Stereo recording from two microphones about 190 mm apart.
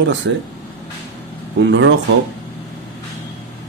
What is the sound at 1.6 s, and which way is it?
Speech, 70° right (ahead or behind).